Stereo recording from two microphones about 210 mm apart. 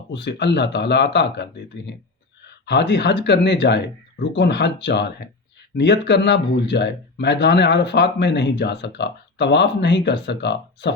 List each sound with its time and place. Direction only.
0.1 s speech: 55° left (ahead or behind)